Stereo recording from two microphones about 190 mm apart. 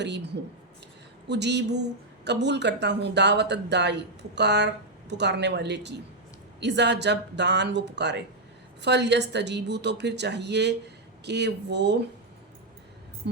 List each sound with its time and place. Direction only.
0.0 s speech: 65° right (ahead or behind)
1.3 s speech: 65° right (ahead or behind)
13.2 s speech: 60° right (ahead or behind)